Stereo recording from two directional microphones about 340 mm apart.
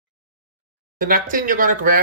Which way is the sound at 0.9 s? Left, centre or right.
Right.